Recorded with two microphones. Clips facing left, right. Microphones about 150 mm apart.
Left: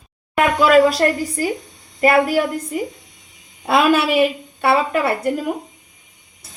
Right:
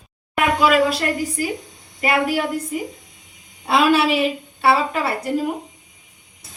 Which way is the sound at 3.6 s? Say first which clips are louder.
Left 1 dB; 50° left (ahead or behind).